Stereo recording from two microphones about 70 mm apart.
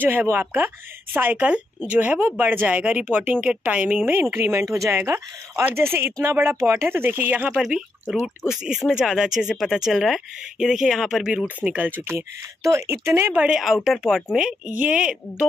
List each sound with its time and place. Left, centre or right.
0.0 s speech: right
8.1 s speech: centre
11.6 s speech: right
12.0 s speech: right
13.5 s speech: centre
14.8 s speech: centre